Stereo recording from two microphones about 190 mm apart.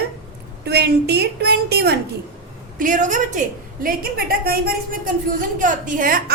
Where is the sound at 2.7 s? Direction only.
45° right (ahead or behind).